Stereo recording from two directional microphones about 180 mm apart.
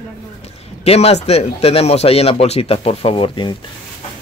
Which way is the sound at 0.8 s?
35° left (ahead or behind).